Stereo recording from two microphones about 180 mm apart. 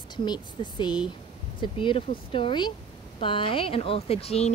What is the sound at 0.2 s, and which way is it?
Speech, 25° left (ahead or behind).